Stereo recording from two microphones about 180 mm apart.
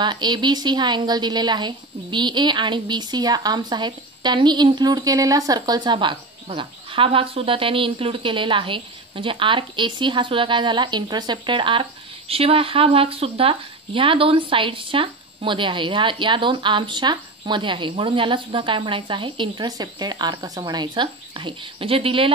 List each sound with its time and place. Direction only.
0.0 s a woman's voice: 25° right (ahead or behind)